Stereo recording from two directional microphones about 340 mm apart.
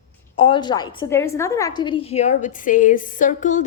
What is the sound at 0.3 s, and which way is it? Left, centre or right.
A woman's voice, centre.